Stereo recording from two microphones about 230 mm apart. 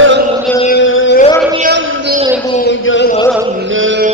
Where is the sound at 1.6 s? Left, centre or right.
Right.